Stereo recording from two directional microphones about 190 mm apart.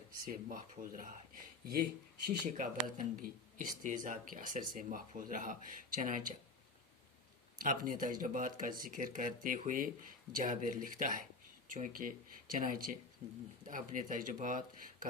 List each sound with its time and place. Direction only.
0.3 s speech: 45° right (ahead or behind)
7.6 s speech: 45° right (ahead or behind)
13.2 s speech: 25° right (ahead or behind)
13.7 s speech: 45° right (ahead or behind)